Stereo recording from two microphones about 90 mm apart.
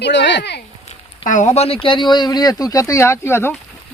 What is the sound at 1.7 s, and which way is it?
Speech, 70° left (ahead or behind).